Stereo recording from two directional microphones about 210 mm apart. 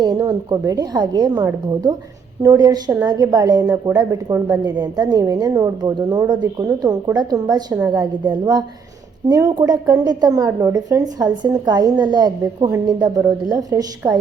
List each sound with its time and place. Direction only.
0.0 s a woman's voice: 20° right (ahead or behind)